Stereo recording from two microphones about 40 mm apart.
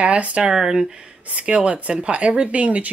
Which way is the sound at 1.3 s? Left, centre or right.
Right.